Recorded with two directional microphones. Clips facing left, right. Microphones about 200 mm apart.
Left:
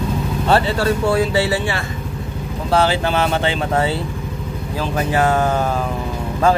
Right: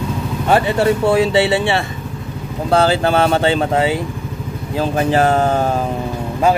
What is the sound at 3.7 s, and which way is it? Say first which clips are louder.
Speech: right 2 dB; 15° right (ahead or behind).